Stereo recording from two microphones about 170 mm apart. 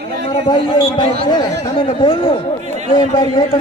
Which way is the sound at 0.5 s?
25° left (ahead or behind).